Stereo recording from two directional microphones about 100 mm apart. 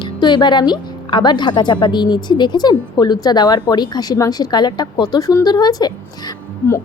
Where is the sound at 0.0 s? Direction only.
50° left (ahead or behind).